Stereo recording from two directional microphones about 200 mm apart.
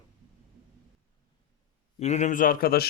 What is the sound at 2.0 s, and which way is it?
Speech, 35° left (ahead or behind).